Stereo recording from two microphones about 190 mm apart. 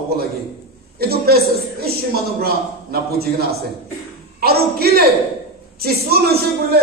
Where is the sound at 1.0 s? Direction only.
55° right (ahead or behind).